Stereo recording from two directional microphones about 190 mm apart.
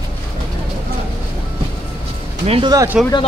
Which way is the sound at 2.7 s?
15° right (ahead or behind).